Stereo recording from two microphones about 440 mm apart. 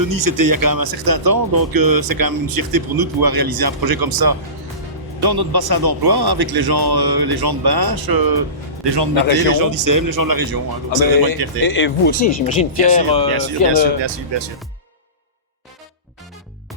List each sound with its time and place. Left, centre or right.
0.0 s speech: right
9.5 s speech: right
11.6 s speech: left
13.3 s speech: right